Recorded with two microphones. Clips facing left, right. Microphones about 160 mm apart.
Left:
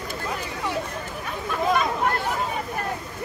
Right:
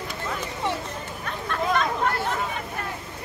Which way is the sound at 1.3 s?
5° left (ahead or behind).